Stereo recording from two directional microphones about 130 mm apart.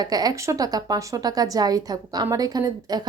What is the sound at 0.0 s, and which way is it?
A woman's voice, 30° right (ahead or behind).